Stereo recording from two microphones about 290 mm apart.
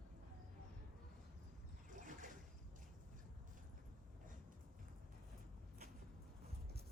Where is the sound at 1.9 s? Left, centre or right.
Right.